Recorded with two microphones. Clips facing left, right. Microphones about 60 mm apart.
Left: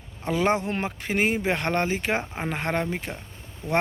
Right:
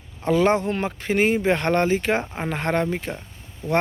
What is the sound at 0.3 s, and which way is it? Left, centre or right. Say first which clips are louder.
Speech: right 5 dB; centre.